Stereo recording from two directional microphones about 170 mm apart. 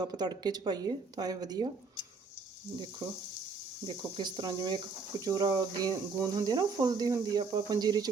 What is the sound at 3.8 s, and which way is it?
Speech, 25° right (ahead or behind).